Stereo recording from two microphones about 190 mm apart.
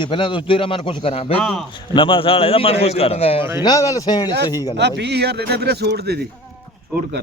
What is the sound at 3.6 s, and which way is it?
A man's voice, 20° left (ahead or behind).